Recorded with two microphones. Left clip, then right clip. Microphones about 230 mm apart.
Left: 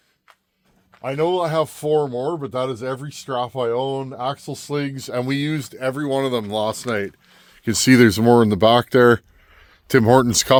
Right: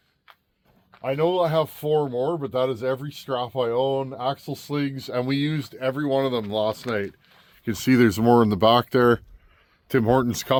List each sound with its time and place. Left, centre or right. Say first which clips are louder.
1.0 s speech: left 1 dB; left
8.0 s speech: even; left
9.8 s speech: left 6 dB; left